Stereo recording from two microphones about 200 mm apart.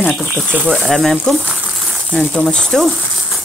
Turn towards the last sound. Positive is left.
turn(degrees=0)  # may be behind; listen again after turning